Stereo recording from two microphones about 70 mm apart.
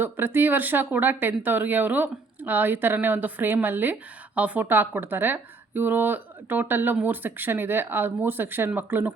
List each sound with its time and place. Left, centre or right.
0.0 s speech: right